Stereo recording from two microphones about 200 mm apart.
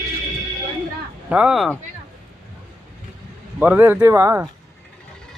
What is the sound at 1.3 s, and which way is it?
Speech, 5° right (ahead or behind).